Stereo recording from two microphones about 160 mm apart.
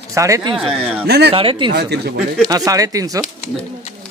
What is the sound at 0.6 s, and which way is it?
Speech, centre (ahead or behind).